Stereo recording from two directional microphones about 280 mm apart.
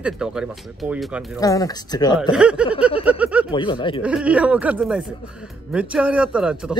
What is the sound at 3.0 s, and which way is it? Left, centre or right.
Speech, centre.